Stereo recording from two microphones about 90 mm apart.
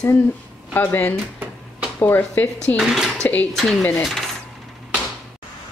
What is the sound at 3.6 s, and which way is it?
Speech, centre (ahead or behind).